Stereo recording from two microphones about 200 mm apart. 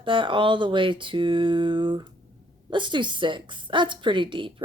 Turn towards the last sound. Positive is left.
turn(degrees=-25)  # may be behind; listen again after turning